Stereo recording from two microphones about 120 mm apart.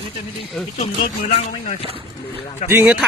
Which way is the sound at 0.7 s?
60° left (ahead or behind).